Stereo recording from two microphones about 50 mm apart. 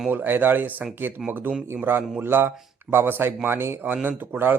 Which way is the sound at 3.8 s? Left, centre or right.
Right.